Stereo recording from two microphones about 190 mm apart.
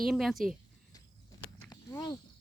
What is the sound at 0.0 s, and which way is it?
Speech, centre (ahead or behind).